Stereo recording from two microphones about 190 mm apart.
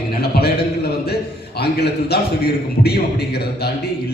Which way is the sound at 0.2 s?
55° left (ahead or behind).